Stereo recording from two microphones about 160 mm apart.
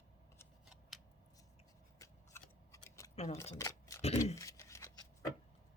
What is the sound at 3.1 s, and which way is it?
Speech, 40° left (ahead or behind).